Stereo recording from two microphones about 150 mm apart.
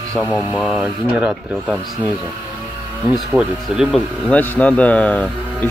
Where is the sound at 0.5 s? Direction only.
Centre (ahead or behind).